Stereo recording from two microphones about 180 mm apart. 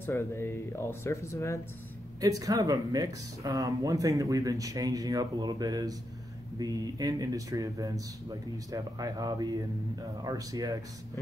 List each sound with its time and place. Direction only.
0.0 s speech: 15° left (ahead or behind)
2.1 s speech: 20° right (ahead or behind)